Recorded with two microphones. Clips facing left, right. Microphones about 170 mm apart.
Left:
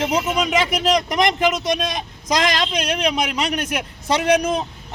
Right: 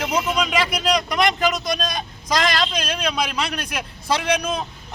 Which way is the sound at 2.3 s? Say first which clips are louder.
Left 1 dB; 20° left (ahead or behind).